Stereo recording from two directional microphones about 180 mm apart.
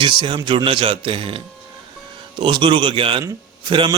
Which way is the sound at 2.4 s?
30° right (ahead or behind).